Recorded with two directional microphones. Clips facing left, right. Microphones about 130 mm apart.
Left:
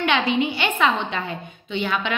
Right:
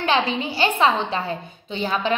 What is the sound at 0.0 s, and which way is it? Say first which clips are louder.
A woman's voice: left 1 dB; 35° right (ahead or behind).